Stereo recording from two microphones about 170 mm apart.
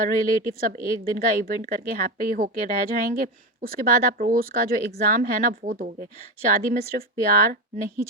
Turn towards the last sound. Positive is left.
turn(degrees=-60)  # may be behind; listen again after turning